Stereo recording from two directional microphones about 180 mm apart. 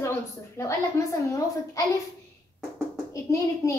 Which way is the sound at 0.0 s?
15° left (ahead or behind).